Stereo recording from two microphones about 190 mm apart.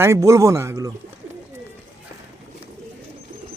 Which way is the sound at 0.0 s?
15° right (ahead or behind).